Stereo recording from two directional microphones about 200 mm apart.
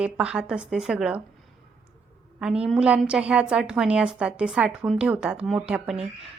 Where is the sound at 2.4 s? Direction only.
5° right (ahead or behind).